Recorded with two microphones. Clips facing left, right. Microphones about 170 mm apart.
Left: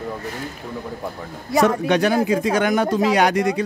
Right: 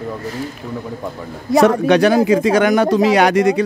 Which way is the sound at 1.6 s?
80° right.